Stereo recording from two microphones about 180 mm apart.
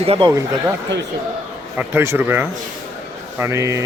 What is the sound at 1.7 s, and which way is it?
Speech, 10° right (ahead or behind).